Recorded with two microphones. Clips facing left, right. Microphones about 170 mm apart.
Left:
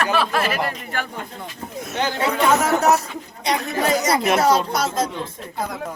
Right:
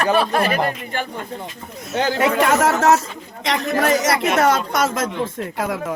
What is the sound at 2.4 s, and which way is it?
Speech, 90° right.